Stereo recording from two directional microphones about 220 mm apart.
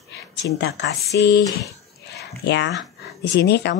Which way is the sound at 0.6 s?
50° left (ahead or behind).